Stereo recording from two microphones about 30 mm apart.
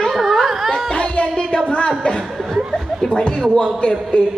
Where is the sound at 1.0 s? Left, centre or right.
Left.